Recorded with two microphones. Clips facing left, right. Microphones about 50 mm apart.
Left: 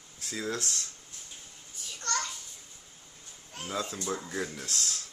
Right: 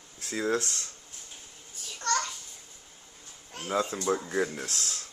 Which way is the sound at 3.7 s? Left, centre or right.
Right.